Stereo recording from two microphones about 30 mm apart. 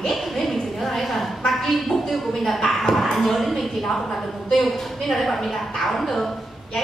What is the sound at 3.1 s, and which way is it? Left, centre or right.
Speech, centre.